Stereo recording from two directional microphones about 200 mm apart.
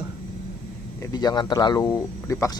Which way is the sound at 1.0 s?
20° left (ahead or behind).